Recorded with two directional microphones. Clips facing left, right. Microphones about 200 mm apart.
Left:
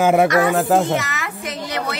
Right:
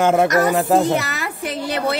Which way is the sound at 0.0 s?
5° left (ahead or behind).